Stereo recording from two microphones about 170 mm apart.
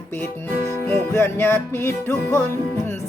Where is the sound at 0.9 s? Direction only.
15° left (ahead or behind).